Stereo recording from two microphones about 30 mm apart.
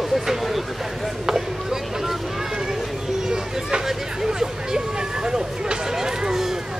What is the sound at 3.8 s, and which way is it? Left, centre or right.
Speech, centre.